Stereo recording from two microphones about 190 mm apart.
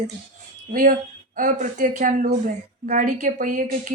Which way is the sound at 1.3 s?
40° right (ahead or behind).